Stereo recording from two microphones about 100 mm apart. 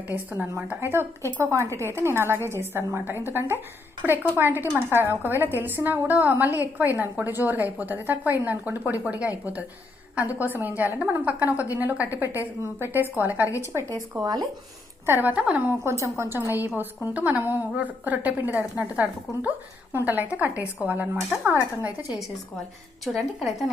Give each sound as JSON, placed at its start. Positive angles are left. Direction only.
{"t": 0.7, "sound": "a woman's voice", "side_deg": -25}
{"t": 14.2, "sound": "speech", "side_deg": -40}
{"t": 15.0, "sound": "a woman's voice", "side_deg": -20}
{"t": 15.8, "sound": "a woman's voice", "side_deg": -30}
{"t": 23.0, "sound": "a woman's voice", "side_deg": 0}